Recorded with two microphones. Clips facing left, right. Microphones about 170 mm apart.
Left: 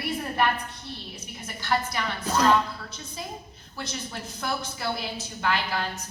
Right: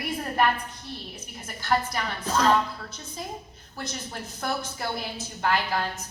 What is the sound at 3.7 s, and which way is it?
A woman's voice, 45° right (ahead or behind).